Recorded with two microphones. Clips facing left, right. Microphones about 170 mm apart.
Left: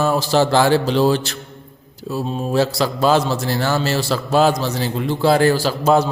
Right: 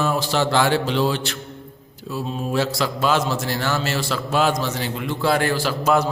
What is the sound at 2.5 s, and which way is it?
A man's voice, 35° left (ahead or behind).